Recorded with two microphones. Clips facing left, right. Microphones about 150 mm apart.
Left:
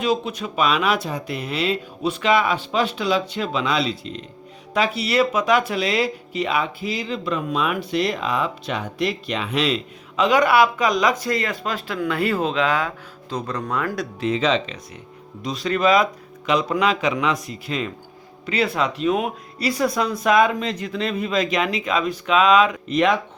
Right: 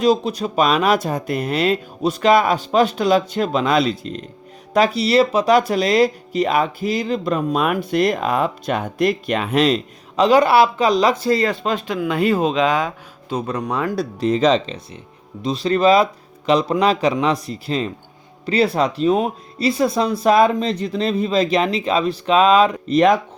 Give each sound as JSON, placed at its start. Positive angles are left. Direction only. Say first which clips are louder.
{"t": 0.0, "sound": "speech", "louder": "right 6 dB", "side_deg": -35}
{"t": 15.4, "sound": "speech", "louder": "right 4 dB", "side_deg": -25}